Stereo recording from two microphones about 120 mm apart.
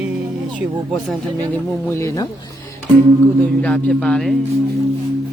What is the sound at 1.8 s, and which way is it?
Speech, 25° left (ahead or behind).